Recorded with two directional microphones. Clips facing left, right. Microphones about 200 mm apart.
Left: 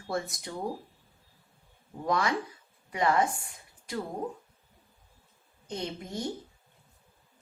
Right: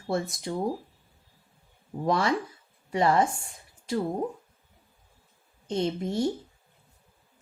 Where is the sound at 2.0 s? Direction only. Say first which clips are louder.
Right 3 dB; 30° right (ahead or behind).